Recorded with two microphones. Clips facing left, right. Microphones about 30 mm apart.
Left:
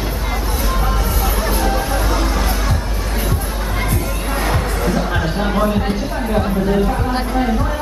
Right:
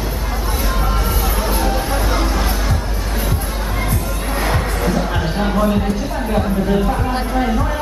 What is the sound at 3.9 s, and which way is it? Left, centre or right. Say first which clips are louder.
Music: left 1 dB; centre.